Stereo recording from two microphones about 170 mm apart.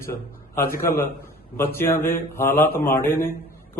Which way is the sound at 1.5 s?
15° left (ahead or behind).